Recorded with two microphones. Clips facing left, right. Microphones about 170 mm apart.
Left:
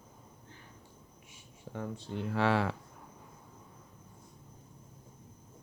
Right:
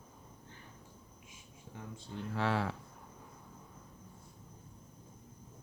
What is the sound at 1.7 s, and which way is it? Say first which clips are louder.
Speech: left 7 dB; 75° left (ahead or behind).